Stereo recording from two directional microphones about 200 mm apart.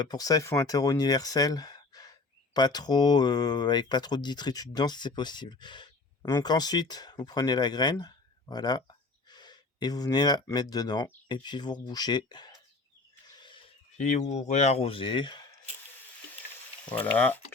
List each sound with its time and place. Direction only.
0.0 s speech: 20° left (ahead or behind)
14.0 s speech: 35° left (ahead or behind)
16.9 s speech: 10° left (ahead or behind)